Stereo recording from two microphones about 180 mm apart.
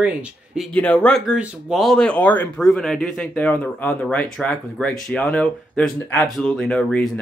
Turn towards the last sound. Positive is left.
turn(degrees=5)  # may be behind; listen again after turning